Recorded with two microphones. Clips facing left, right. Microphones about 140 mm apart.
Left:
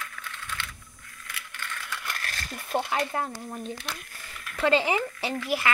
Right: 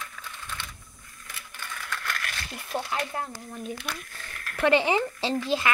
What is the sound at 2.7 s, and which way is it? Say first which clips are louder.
Speech: left 3 dB; 55° left (ahead or behind).